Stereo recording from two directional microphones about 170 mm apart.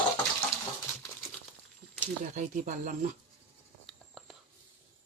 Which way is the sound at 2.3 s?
45° right (ahead or behind).